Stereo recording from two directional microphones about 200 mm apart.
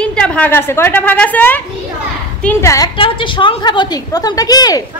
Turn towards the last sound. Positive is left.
turn(degrees=20)  # may be behind; listen again after turning